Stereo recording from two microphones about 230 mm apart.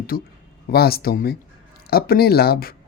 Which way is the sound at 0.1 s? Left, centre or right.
Left.